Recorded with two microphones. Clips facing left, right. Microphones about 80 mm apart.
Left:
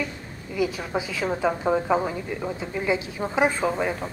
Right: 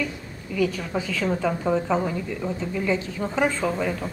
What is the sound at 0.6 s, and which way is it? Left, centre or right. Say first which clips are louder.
A woman's voice: right 1 dB; centre.